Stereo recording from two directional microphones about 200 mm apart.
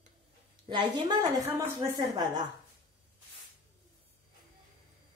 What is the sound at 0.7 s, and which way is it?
A woman's voice, 20° right (ahead or behind).